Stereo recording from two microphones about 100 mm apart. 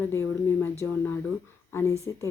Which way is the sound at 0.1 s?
25° left (ahead or behind).